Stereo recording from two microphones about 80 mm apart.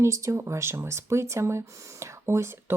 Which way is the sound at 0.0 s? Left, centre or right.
Right.